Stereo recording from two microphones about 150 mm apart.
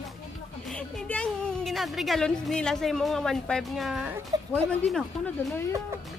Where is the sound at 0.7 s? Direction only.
5° left (ahead or behind).